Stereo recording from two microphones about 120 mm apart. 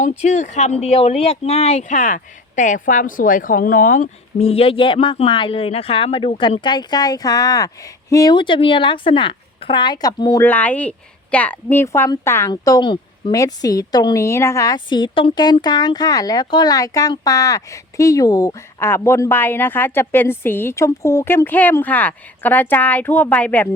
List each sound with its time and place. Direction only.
0.0 s speech: 75° left (ahead or behind); by 10.4 s 30° left (ahead or behind)
10.4 s a woman's voice: 15° left (ahead or behind)
12.5 s speech: 35° left (ahead or behind)
13.3 s speech: 30° left (ahead or behind)
14.8 s speech: 40° left (ahead or behind); by 23.6 s 15° left (ahead or behind)